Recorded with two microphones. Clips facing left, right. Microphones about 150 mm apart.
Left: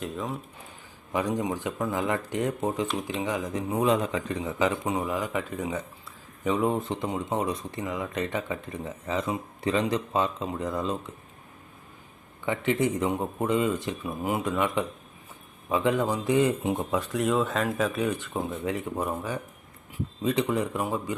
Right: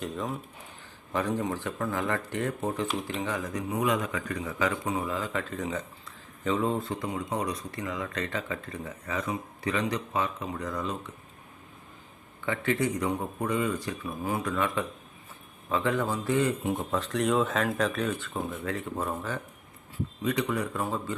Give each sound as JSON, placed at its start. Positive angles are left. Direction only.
{"t": 0.0, "sound": "speech", "side_deg": 0}
{"t": 1.1, "sound": "speech", "side_deg": 15}
{"t": 12.5, "sound": "speech", "side_deg": 20}
{"t": 16.9, "sound": "speech", "side_deg": 5}
{"t": 20.2, "sound": "speech", "side_deg": 25}